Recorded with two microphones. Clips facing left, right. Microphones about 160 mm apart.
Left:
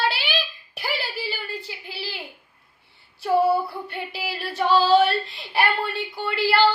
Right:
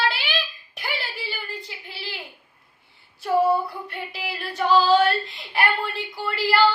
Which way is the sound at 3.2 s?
Centre (ahead or behind).